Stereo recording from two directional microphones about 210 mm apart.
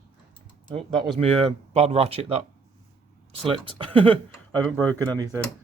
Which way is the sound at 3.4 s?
25° right (ahead or behind).